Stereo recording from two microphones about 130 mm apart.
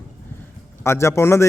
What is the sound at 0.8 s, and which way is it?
Speech, 20° left (ahead or behind).